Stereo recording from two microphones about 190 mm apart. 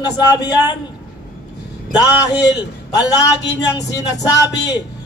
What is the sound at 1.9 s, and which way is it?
A man's voice, 20° left (ahead or behind).